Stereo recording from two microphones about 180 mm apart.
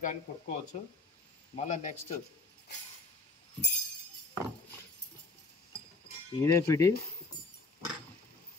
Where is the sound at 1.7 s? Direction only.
40° left (ahead or behind).